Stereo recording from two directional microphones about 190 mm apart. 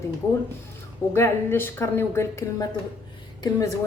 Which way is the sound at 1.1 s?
15° left (ahead or behind).